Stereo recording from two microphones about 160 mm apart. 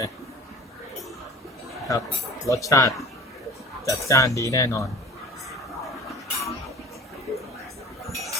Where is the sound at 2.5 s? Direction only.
20° left (ahead or behind).